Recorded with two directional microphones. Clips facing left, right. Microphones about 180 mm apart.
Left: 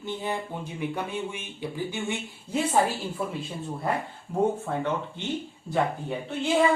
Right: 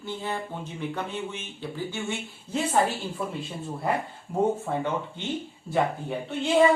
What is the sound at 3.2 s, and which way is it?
Speech, 5° left (ahead or behind).